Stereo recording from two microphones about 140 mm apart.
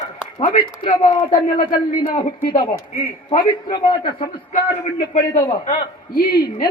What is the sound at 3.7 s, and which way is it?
Speech, 35° left (ahead or behind).